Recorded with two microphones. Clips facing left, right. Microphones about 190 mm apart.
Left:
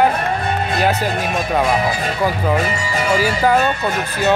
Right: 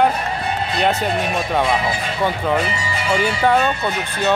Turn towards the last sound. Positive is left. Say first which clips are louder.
# left 1 dB
turn(degrees=5)  # may be behind; listen again after turning